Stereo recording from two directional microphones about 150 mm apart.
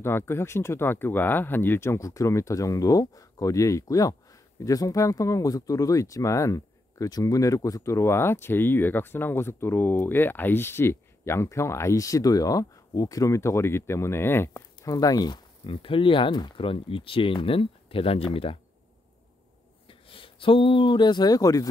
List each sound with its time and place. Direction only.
0.0 s speech: 15° left (ahead or behind); by 18.6 s 40° left (ahead or behind)
19.9 s speech: 35° left (ahead or behind)